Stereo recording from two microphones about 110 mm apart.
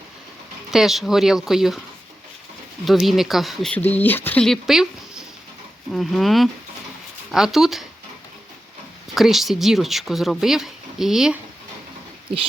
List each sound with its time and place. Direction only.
0.7 s speech: 5° right (ahead or behind)
2.8 s speech: centre (ahead or behind)
3.7 s speech: 15° left (ahead or behind)
4.4 s speech: centre (ahead or behind)
9.1 s speech: centre (ahead or behind)